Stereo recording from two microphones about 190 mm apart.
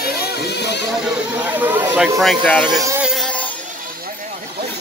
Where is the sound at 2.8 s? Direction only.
15° right (ahead or behind).